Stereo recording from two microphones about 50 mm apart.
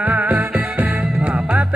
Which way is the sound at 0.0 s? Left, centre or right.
Right.